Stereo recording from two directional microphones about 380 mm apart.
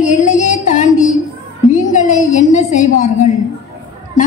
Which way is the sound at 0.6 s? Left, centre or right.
Centre.